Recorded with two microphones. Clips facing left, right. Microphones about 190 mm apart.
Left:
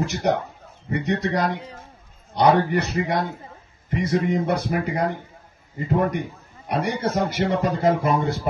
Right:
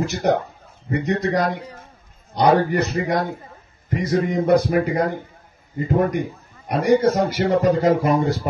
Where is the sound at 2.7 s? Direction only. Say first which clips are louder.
Right 2 dB; 50° right (ahead or behind).